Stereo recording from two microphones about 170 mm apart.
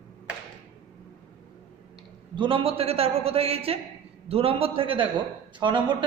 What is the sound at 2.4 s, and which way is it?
A man's voice, 30° right (ahead or behind).